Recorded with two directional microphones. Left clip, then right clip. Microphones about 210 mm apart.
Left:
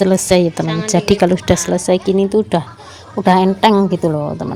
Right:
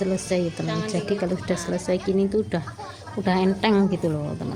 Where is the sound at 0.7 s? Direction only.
20° left (ahead or behind).